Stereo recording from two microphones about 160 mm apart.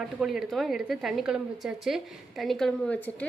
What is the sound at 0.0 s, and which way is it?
A woman's voice, 5° right (ahead or behind).